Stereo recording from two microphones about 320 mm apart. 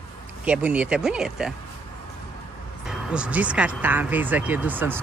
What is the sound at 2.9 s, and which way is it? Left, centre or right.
Speech, centre.